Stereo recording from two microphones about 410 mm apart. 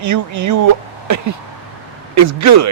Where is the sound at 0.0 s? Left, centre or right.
Right.